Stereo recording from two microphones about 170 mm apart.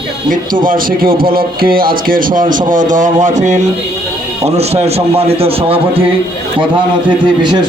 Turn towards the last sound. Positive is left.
turn(degrees=-35)  # may be behind; listen again after turning